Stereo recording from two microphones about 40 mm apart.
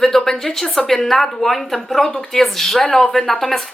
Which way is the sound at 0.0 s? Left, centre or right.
Centre.